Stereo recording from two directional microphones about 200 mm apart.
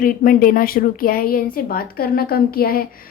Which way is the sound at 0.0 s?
45° left (ahead or behind).